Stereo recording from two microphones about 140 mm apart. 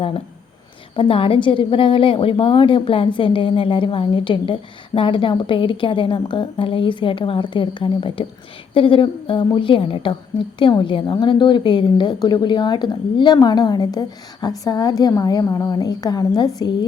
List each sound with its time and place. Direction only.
0.9 s a woman's voice: 40° left (ahead or behind)